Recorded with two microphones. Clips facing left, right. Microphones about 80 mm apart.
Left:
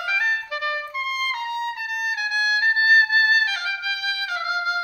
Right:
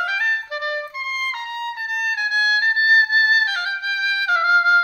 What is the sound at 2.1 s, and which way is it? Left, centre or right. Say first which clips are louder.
Music: right 3 dB; right.